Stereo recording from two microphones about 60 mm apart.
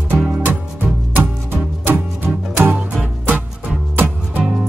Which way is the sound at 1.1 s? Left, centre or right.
Right.